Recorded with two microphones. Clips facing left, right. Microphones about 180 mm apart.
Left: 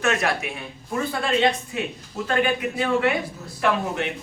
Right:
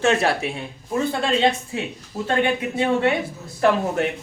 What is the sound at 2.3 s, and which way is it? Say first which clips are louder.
Speech: right 1 dB; 25° right (ahead or behind).